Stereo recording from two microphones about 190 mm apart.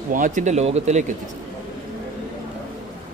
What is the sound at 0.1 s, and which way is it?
Speech, 45° right (ahead or behind).